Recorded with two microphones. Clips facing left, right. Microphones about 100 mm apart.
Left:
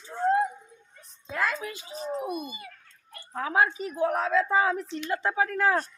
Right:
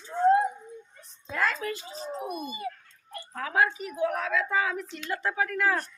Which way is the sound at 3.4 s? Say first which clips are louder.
Left 1 dB; 25° left (ahead or behind).